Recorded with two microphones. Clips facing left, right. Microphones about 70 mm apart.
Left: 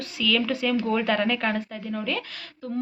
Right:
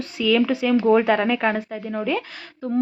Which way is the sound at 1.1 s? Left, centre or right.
Centre.